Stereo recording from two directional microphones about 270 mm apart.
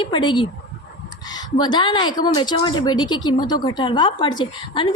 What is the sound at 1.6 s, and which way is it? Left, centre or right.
A woman's voice, centre.